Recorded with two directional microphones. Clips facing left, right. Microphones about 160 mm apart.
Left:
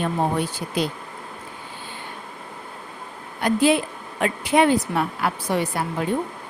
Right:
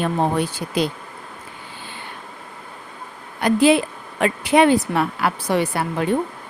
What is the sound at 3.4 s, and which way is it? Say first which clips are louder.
A woman's voice: right 3 dB; 85° right.